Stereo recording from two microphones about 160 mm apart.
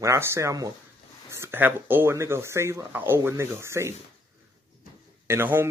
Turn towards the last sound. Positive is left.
turn(degrees=-15)  # may be behind; listen again after turning